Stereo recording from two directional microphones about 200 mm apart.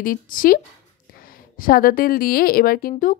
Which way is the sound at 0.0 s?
45° left (ahead or behind).